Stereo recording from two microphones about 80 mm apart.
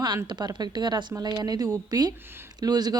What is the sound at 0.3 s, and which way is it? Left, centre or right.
A woman's voice, right.